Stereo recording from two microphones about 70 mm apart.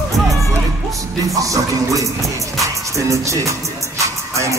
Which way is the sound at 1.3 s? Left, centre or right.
Right.